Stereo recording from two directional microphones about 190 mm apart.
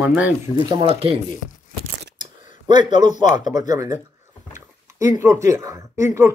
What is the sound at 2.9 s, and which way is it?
Speech, 40° left (ahead or behind).